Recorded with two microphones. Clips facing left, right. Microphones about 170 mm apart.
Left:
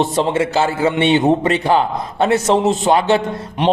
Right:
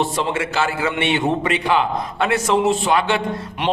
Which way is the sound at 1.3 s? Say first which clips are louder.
Left 5 dB; 40° left (ahead or behind).